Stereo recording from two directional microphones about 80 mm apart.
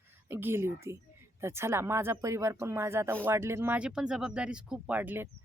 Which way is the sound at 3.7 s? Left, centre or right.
Centre.